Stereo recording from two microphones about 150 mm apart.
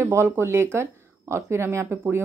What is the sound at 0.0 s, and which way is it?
Speech, 15° right (ahead or behind).